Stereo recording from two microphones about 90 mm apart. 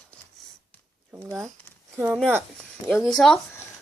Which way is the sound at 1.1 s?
30° right (ahead or behind).